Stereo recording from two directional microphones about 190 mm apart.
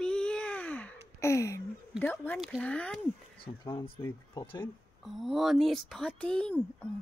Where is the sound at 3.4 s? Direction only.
25° left (ahead or behind).